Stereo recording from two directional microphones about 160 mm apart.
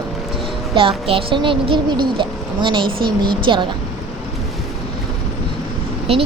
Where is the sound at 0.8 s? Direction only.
35° right (ahead or behind).